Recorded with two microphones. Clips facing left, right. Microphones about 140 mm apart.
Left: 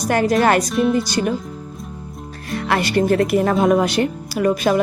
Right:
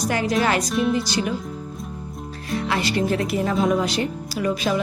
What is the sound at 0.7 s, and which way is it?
Speech, centre (ahead or behind).